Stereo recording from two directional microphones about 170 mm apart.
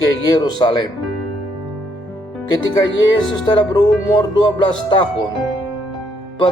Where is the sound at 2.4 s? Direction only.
25° left (ahead or behind).